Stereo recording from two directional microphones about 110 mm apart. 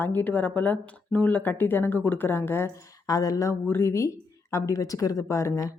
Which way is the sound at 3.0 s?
35° left (ahead or behind).